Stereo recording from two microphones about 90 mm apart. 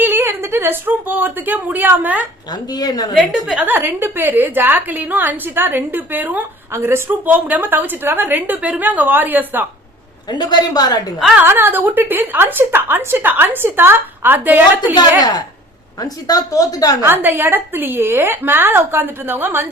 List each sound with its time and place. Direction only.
0.0 s a woman's voice: 25° right (ahead or behind)
2.7 s a man's voice: 45° left (ahead or behind)
3.7 s a woman's voice: 25° right (ahead or behind)
10.3 s a man's voice: 50° left (ahead or behind)
11.4 s a woman's voice: 25° right (ahead or behind)
16.0 s a woman's voice: 45° left (ahead or behind)
17.0 s a woman's voice: 25° right (ahead or behind)